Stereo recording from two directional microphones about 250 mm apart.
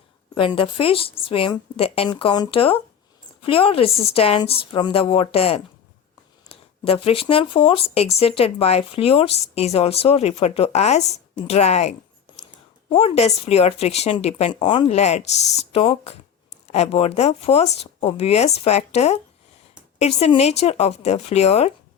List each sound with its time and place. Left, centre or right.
0.3 s speech: left
6.8 s speech: left